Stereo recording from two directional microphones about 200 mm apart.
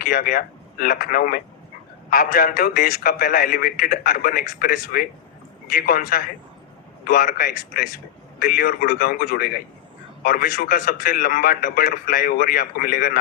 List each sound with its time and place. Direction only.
0.0 s a man's voice: 45° left (ahead or behind)